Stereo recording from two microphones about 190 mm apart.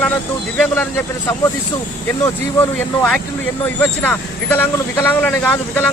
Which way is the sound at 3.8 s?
10° left (ahead or behind).